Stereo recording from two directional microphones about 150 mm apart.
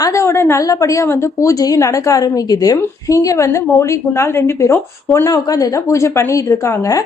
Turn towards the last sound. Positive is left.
turn(degrees=20)  # may be behind; listen again after turning